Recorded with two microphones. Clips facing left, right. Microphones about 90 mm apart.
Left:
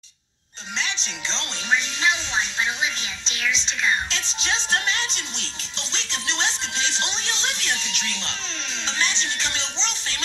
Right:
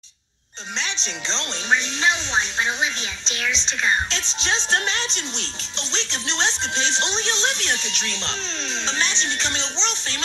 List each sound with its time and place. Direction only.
1.0 s speech: 25° right (ahead or behind)